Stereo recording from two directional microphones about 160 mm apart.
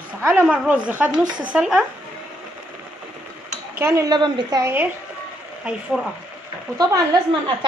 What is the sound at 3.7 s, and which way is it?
Speech, 20° right (ahead or behind).